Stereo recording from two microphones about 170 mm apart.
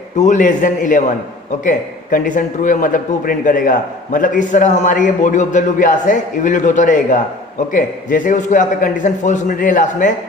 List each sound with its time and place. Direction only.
0.2 s a man's voice: 45° left (ahead or behind)